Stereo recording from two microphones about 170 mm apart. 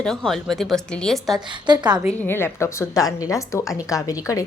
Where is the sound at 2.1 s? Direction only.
15° left (ahead or behind).